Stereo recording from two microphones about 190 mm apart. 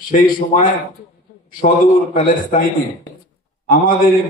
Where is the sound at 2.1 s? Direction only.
45° left (ahead or behind).